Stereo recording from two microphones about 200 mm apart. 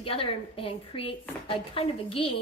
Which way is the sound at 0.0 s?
25° left (ahead or behind).